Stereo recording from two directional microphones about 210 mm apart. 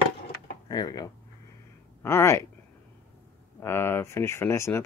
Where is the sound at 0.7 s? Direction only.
20° left (ahead or behind).